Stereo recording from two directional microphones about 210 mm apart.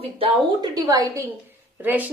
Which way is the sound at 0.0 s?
20° right (ahead or behind).